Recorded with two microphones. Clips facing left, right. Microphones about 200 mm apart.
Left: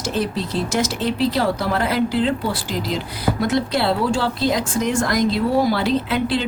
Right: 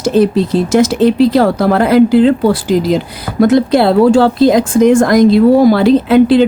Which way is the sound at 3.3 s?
50° right (ahead or behind).